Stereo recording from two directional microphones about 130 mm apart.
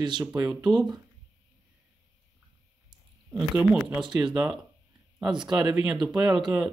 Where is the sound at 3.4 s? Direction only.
5° right (ahead or behind).